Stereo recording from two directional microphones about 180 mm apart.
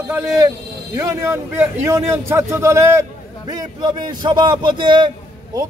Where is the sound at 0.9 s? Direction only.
15° right (ahead or behind).